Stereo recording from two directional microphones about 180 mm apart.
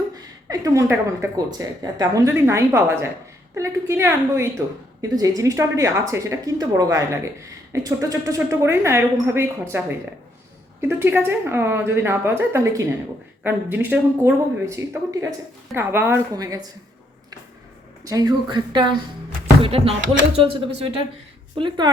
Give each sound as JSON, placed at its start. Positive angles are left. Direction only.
{"t": 0.2, "sound": "speech", "side_deg": -20}
{"t": 18.0, "sound": "a woman's voice", "side_deg": -20}